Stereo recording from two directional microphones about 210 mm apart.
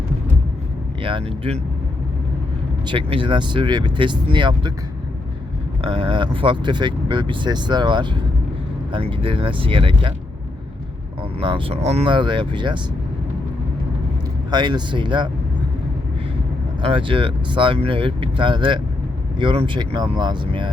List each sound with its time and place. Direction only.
1.0 s speech: 25° right (ahead or behind)
2.8 s speech: 25° right (ahead or behind)
5.8 s speech: 25° right (ahead or behind)
11.3 s speech: 25° right (ahead or behind)
14.5 s speech: 20° right (ahead or behind)
16.8 s speech: 25° right (ahead or behind)